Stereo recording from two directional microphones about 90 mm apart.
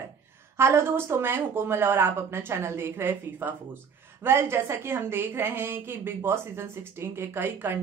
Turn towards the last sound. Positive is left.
turn(degrees=-25)  # may be behind; listen again after turning